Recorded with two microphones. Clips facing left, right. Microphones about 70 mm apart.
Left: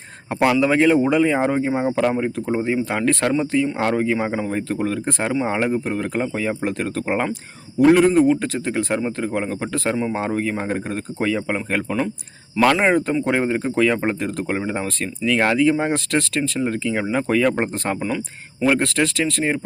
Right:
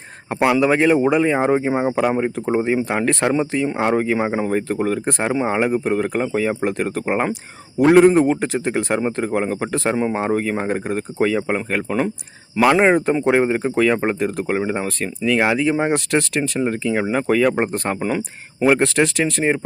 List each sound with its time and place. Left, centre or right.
0.3 s a man's voice: centre
0.5 s speech: centre
2.9 s speech: centre
4.5 s speech: centre
9.3 s speech: centre
9.9 s speech: right
10.2 s speech: centre
12.7 s speech: centre